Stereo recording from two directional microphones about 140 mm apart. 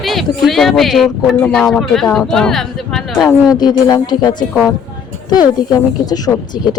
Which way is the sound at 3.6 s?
30° left (ahead or behind).